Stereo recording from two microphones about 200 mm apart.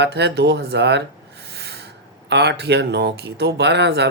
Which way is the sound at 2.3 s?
60° right (ahead or behind).